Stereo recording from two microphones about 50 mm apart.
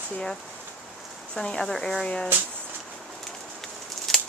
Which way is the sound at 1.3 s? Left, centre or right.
Centre.